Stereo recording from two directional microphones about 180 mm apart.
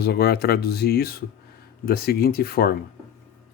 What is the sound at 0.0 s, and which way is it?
Speech, 60° left (ahead or behind).